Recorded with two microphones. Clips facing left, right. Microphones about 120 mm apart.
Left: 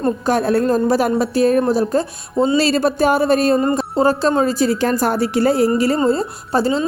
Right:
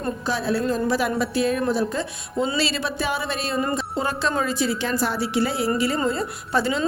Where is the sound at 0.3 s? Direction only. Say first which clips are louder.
Left 7 dB; 50° left (ahead or behind).